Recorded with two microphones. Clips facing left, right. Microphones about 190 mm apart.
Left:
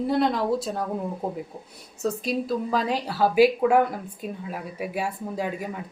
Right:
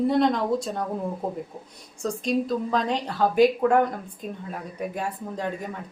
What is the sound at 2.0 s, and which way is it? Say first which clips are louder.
A woman's voice: right 1 dB; 5° left (ahead or behind).